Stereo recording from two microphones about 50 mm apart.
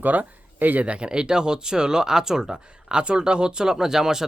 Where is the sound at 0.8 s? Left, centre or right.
Centre.